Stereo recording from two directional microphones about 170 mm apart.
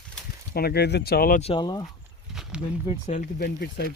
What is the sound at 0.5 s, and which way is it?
Speech, 70° left (ahead or behind).